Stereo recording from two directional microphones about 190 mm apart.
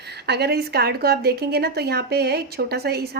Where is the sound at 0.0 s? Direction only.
60° right (ahead or behind).